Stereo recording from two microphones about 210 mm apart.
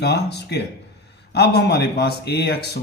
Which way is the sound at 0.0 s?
50° left (ahead or behind).